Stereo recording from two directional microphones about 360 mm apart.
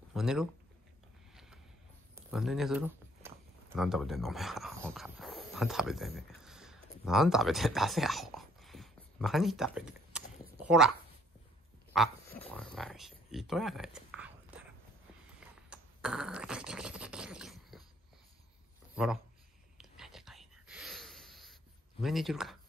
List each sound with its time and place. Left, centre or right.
0.1 s speech: centre
1.3 s a sound: centre
11.9 s speech: centre
15.4 s scratch: centre
19.0 s speech: centre
19.8 s whispering: centre
22.0 s speech: centre